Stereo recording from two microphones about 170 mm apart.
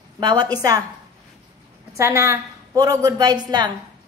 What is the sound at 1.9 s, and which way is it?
A woman's voice, 15° right (ahead or behind).